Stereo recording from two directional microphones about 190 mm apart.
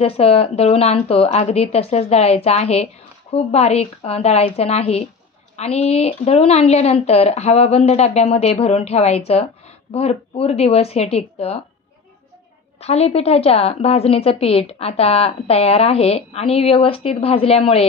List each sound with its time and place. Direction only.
0.0 s a woman's voice: 30° left (ahead or behind)
12.8 s a woman's voice: 35° left (ahead or behind)